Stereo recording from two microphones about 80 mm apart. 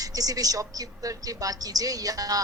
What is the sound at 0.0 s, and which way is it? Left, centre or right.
A woman's voice, right.